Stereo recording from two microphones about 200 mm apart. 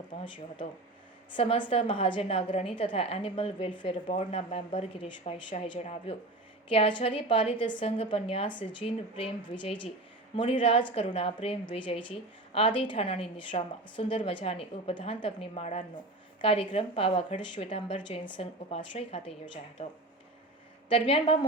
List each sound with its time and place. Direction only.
0.3 s a woman's voice: 25° left (ahead or behind)
20.9 s a woman's voice: 25° left (ahead or behind)